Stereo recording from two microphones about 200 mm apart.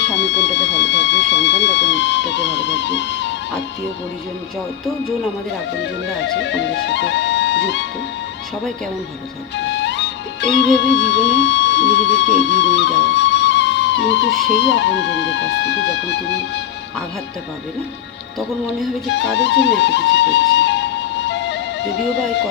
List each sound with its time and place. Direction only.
0.7 s music: 60° left (ahead or behind)
5.8 s music: 60° left (ahead or behind)
9.6 s music: 65° left (ahead or behind)
19.1 s music: 60° left (ahead or behind)